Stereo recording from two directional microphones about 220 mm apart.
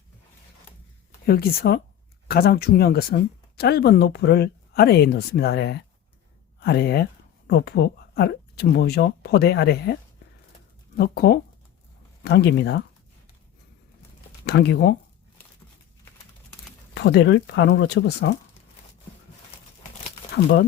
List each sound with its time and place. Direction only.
1.3 s speech: 45° left (ahead or behind)
14.4 s speech: 50° left (ahead or behind)
16.9 s speech: 50° left (ahead or behind)